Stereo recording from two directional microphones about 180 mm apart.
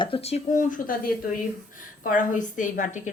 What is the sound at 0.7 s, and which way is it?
A woman's voice, 50° left (ahead or behind).